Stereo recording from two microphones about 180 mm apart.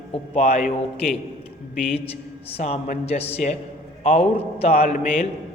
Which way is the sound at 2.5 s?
35° left (ahead or behind).